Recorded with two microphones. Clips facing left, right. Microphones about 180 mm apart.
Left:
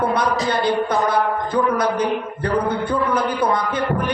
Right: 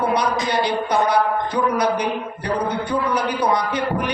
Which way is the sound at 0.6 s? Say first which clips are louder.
Even; 50° left (ahead or behind).